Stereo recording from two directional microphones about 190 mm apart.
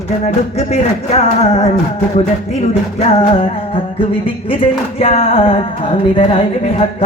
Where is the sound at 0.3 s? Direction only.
35° left (ahead or behind).